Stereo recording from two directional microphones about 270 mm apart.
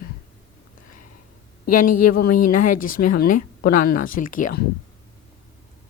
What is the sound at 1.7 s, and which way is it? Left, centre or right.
Speech, left.